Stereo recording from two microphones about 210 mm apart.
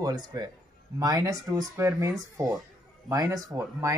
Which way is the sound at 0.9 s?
20° right (ahead or behind).